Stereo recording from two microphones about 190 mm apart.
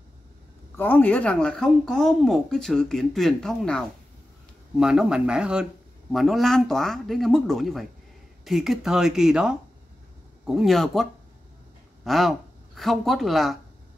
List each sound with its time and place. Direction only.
0.7 s speech: 10° left (ahead or behind)